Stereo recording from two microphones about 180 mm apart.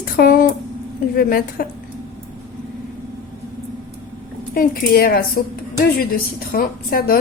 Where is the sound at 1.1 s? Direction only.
55° left (ahead or behind).